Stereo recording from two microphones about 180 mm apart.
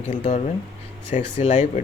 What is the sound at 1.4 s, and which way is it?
Speech, 40° left (ahead or behind).